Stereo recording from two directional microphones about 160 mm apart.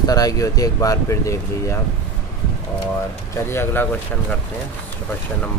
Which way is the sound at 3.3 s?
15° left (ahead or behind).